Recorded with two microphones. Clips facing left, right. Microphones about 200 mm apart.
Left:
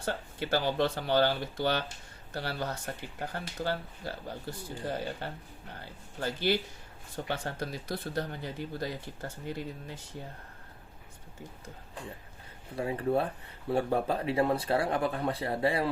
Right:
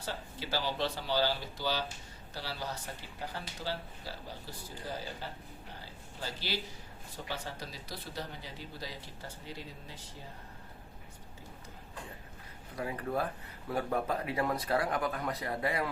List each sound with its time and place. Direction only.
0.0 s speech: 55° left (ahead or behind)
12.7 s speech: 30° left (ahead or behind)